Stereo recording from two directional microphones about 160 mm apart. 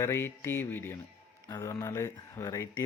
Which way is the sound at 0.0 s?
15° left (ahead or behind).